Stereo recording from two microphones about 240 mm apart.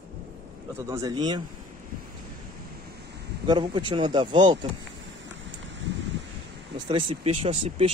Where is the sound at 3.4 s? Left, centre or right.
Centre.